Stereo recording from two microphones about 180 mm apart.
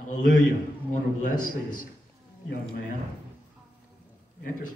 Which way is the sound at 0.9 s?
45° left (ahead or behind).